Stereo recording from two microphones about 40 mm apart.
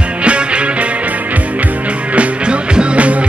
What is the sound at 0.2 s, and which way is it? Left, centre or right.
Music, right.